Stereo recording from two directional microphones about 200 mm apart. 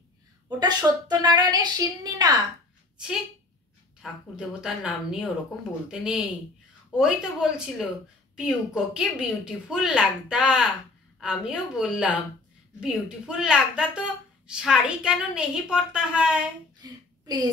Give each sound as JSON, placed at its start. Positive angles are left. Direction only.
{"t": 0.5, "sound": "a woman's voice", "side_deg": -20}
{"t": 4.0, "sound": "a woman's voice", "side_deg": -5}
{"t": 16.8, "sound": "a sound", "side_deg": -20}